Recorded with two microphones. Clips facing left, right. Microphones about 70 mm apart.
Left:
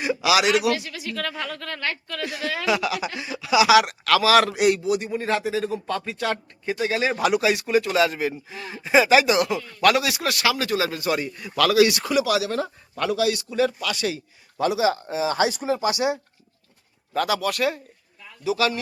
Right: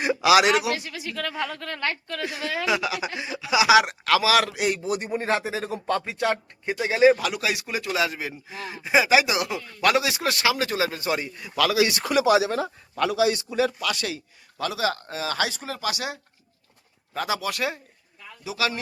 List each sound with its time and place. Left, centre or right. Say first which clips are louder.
0.0 s a sound: right 2 dB; right
0.6 s speech: left 4 dB; right
4.3 s a man's voice: left 6 dB; centre
4.8 s speech: left 3 dB; right
6.1 s speech: right 1 dB; right
7.4 s a man's voice: left 7 dB; centre
12.1 s speech: right 2 dB; right
12.5 s a man's voice: even; centre
13.1 s speech: right 2 dB; right
13.6 s a man's voice: left 4 dB; centre
14.6 s speech: left 5 dB; centre
17.2 s speech: left 2 dB; centre
18.4 s a man's voice: left 5 dB; centre